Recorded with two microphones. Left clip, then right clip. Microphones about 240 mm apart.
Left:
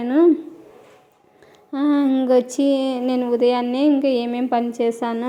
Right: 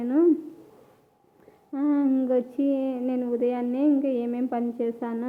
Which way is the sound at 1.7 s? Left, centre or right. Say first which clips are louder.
Left 5 dB; centre.